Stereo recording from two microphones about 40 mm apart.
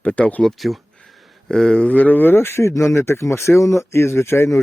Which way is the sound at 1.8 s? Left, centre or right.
Left.